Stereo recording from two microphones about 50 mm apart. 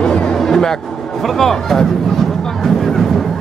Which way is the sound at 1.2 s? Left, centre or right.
Centre.